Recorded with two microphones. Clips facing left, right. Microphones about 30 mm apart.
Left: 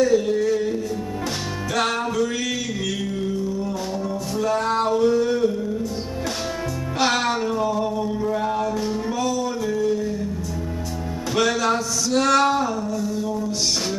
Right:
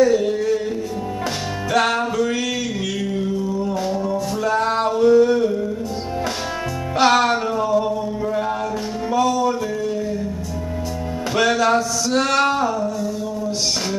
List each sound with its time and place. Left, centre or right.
0.0 s music: centre
1.7 s music: centre
3.6 s music: centre
7.0 s music: centre
9.3 s music: centre
11.3 s music: centre
12.1 s a sound: centre